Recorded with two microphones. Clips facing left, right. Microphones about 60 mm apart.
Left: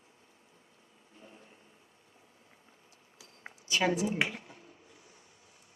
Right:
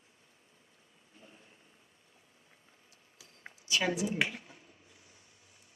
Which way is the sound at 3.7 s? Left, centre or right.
Left.